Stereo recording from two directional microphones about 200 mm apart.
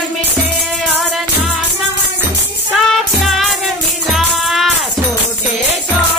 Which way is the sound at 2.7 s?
Centre (ahead or behind).